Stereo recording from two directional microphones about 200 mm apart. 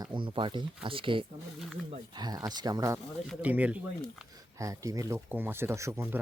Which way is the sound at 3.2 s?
5° right (ahead or behind).